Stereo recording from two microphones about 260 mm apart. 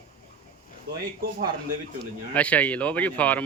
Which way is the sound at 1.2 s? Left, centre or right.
Right.